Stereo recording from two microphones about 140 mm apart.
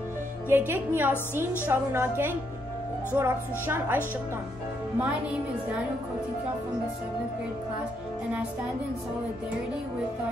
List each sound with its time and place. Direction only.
0.5 s speech: 15° right (ahead or behind)